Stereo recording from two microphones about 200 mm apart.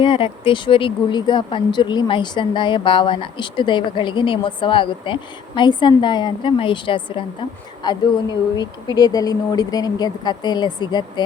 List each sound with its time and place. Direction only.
0.0 s speech: 25° left (ahead or behind)